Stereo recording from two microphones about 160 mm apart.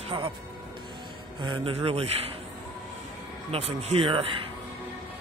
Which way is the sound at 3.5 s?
40° right (ahead or behind).